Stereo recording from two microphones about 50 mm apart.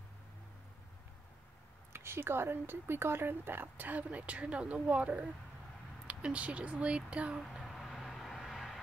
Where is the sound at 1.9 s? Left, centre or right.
Right.